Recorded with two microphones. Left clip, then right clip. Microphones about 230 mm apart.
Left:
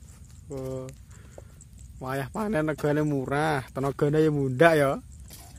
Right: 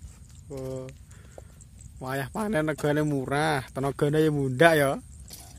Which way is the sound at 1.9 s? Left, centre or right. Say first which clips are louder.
Even; centre.